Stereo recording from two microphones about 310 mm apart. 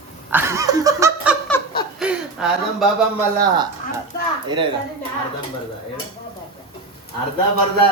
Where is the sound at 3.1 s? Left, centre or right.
Centre.